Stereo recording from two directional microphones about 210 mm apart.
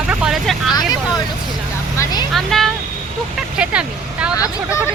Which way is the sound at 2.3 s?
Centre (ahead or behind).